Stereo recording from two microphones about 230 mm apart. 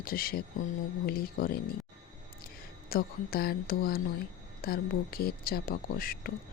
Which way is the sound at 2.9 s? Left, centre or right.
Left.